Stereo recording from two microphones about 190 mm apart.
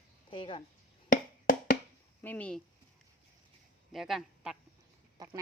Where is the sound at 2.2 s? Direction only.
10° left (ahead or behind).